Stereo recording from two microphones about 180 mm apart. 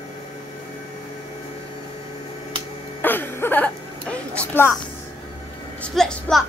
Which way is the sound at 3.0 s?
10° left (ahead or behind).